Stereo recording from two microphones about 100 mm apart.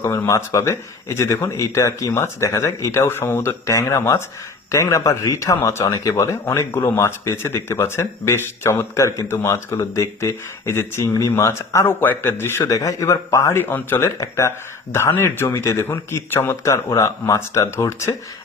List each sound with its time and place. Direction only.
0.0 s speech: 30° left (ahead or behind)
12.6 s speech: 35° left (ahead or behind)
13.6 s speech: 20° left (ahead or behind)
14.2 s speech: 30° left (ahead or behind)